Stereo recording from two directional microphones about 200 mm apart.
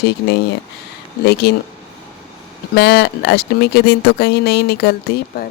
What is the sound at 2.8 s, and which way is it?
Speech, 55° left (ahead or behind).